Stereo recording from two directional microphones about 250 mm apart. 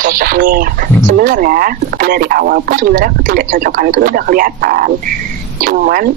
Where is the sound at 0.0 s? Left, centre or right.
Right.